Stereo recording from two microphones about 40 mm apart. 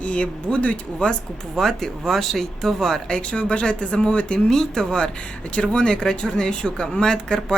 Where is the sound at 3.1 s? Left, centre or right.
Left.